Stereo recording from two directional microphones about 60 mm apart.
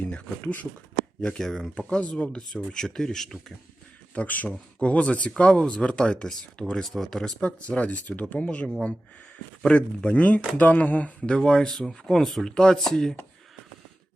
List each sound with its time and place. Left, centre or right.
0.4 s speech: left
1.4 s speech: centre
4.1 s speech: left; by 7.4 s centre
7.4 s speech: centre
9.6 s speech: left
11.3 s speech: centre